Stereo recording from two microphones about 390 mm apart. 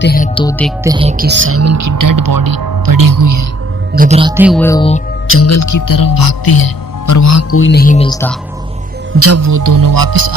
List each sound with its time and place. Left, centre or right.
0.0 s speech: left
0.9 s speech: centre; by 3.4 s right
3.9 s speech: centre
5.3 s speech: left
7.1 s speech: left; by 8.4 s centre
9.1 s speech: right